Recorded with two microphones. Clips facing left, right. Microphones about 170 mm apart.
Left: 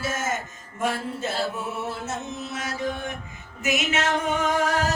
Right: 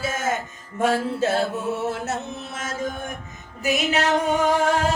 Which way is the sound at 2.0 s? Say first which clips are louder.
Right 3 dB; 70° right (ahead or behind).